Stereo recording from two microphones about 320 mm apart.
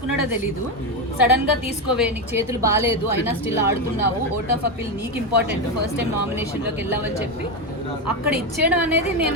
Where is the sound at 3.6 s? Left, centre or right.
Left.